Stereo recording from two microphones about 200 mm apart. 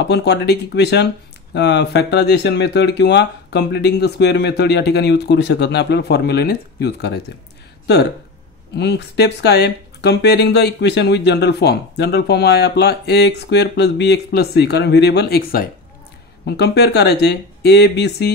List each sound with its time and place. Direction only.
0.0 s speech: 55° left (ahead or behind)